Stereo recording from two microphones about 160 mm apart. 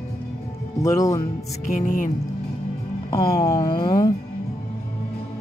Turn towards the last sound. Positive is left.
turn(degrees=25)  # may be behind; listen again after turning